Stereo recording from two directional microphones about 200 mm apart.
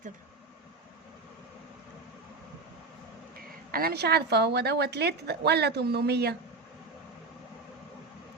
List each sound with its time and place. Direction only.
3.7 s a woman's voice: 50° right (ahead or behind)